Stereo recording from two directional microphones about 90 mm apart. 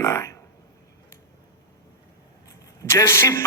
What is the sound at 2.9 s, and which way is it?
Speech, 30° left (ahead or behind).